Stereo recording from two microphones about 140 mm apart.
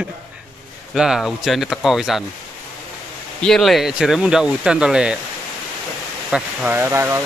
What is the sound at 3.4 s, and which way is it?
Speech, 5° left (ahead or behind).